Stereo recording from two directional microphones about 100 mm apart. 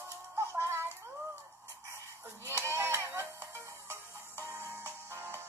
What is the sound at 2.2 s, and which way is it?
Music, 25° right (ahead or behind).